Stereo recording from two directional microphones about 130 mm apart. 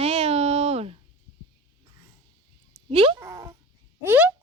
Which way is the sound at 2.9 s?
45° right (ahead or behind).